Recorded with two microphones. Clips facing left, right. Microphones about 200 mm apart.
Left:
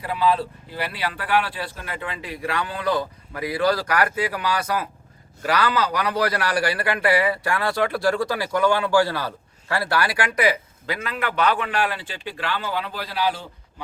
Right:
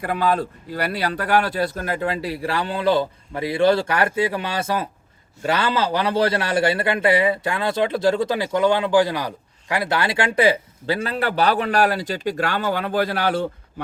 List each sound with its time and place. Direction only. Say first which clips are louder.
0.0 s a man's voice: right 1 dB; 50° right (ahead or behind)